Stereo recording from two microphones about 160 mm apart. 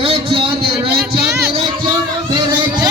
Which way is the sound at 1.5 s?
30° right (ahead or behind).